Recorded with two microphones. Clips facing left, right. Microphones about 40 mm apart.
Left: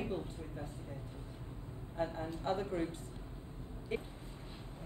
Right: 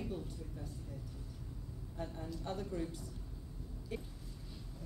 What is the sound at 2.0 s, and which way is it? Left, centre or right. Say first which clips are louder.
A woman's voice: left 6 dB; left.